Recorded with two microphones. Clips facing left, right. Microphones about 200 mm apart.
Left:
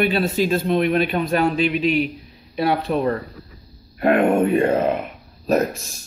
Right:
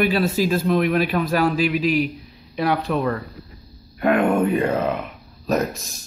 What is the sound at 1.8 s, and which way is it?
Speech, centre (ahead or behind).